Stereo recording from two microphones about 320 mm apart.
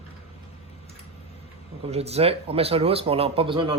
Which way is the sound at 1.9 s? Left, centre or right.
Centre.